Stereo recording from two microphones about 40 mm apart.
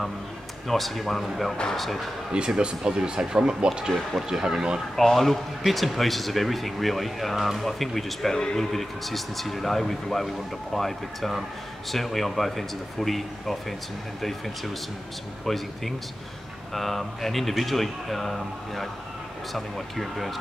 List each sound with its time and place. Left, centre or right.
0.7 s speech: centre
2.3 s speech: right
4.9 s speech: centre